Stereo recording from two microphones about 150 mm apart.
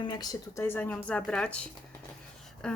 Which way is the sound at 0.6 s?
10° left (ahead or behind).